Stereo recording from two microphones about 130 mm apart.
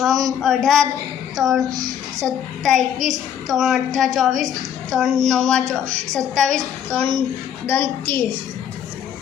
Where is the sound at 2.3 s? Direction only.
5° left (ahead or behind).